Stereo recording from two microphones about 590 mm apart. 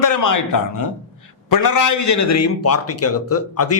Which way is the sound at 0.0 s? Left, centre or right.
Left.